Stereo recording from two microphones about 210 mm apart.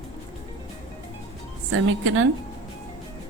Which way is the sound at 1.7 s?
85° right.